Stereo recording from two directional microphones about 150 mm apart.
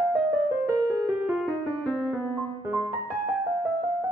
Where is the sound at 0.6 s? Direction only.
10° right (ahead or behind).